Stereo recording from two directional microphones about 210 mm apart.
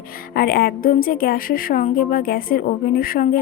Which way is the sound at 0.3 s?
45° left (ahead or behind).